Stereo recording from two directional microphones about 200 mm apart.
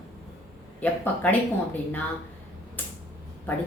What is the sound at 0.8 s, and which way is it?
Speech, 10° left (ahead or behind).